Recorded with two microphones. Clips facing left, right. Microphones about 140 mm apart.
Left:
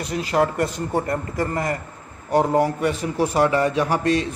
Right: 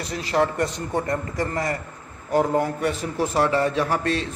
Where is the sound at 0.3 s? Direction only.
30° left (ahead or behind).